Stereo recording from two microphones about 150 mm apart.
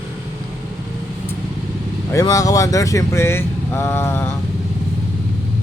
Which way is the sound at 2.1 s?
25° left (ahead or behind).